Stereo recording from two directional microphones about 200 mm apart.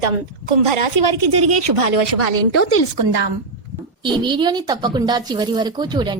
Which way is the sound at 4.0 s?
25° right (ahead or behind).